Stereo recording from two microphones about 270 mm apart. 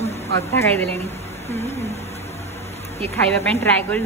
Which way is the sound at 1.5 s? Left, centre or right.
Left.